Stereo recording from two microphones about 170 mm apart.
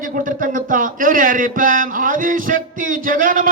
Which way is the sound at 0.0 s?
50° right (ahead or behind).